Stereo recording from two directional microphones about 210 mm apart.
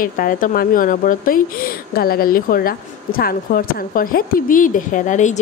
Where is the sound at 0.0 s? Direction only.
40° left (ahead or behind).